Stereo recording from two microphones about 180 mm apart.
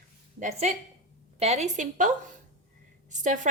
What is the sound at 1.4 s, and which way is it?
A woman's voice, 40° right (ahead or behind).